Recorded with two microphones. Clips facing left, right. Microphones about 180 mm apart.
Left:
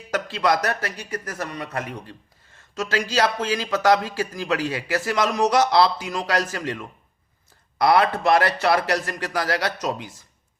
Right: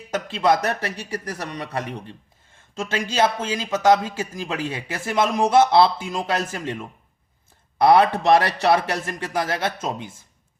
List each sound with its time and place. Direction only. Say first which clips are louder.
0.1 s a man's voice: right 2 dB; 25° right (ahead or behind)